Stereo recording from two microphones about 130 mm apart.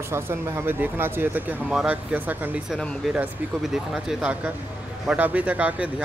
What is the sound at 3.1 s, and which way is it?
Speech, 5° right (ahead or behind).